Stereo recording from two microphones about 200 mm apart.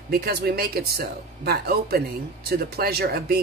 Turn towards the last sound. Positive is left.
turn(degrees=-50)  # may be behind; listen again after turning